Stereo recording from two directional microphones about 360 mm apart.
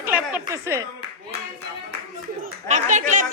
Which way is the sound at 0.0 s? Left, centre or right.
Centre.